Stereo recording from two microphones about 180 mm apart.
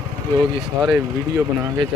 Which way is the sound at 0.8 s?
15° right (ahead or behind).